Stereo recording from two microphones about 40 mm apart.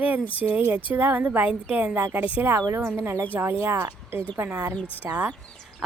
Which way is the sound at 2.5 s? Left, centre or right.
Right.